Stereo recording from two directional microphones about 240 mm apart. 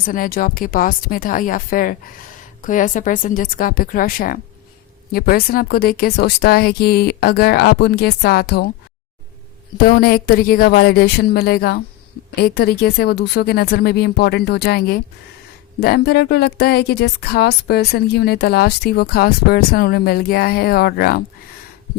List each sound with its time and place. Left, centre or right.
0.0 s speech: left
9.7 s speech: left